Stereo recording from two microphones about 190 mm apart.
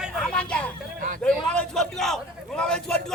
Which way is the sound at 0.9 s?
45° right (ahead or behind).